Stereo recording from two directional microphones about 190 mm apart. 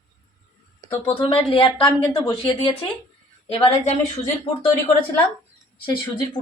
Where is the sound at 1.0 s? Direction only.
30° left (ahead or behind).